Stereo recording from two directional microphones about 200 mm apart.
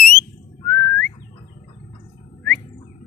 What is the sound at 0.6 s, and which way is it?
Whistling, 5° left (ahead or behind).